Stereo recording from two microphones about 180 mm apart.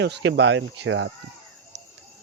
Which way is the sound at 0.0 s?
75° right (ahead or behind).